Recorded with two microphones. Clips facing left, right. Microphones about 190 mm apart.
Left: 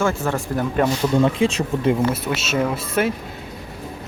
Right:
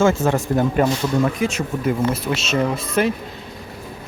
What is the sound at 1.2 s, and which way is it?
Speech, 30° left (ahead or behind).